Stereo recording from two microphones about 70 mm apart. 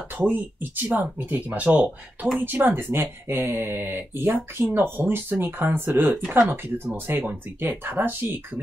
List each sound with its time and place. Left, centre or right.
0.3 s speech: right